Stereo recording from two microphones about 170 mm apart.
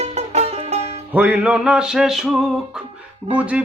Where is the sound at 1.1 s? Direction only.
10° right (ahead or behind).